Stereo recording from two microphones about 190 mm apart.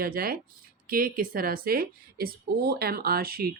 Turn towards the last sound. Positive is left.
turn(degrees=-55)  # may be behind; listen again after turning